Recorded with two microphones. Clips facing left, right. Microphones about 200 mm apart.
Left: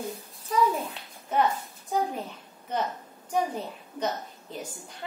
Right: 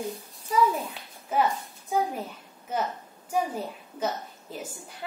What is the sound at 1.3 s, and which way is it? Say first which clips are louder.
A child's voice: even; 5° right (ahead or behind).